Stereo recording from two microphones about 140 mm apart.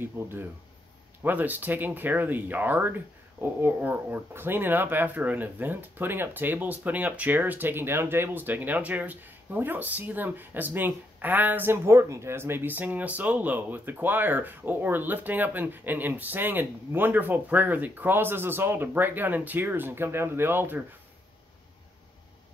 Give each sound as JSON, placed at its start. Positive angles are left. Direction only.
{"t": 0.0, "sound": "speech", "side_deg": -15}